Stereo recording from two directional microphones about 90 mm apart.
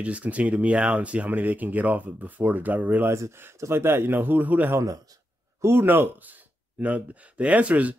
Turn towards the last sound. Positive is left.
turn(degrees=-15)  # may be behind; listen again after turning